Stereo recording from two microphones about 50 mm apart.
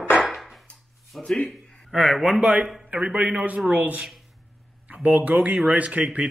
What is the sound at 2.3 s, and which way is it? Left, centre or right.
Speech, centre.